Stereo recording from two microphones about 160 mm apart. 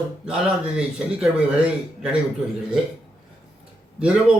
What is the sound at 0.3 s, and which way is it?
A man's voice, 5° right (ahead or behind).